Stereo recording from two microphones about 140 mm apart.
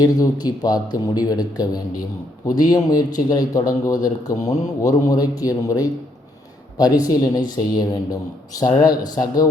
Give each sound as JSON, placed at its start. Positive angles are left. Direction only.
{"t": 0.0, "sound": "speech", "side_deg": 30}